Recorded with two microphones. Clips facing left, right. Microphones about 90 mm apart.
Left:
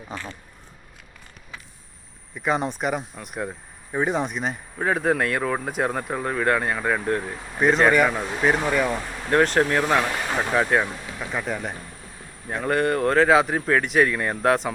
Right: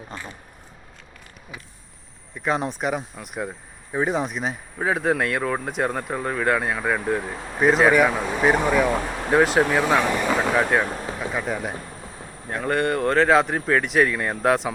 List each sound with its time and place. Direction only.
0.1 s speech: 5° left (ahead or behind)
2.3 s speech: centre (ahead or behind)
10.8 s a sound: 40° right (ahead or behind)
11.2 s speech: centre (ahead or behind)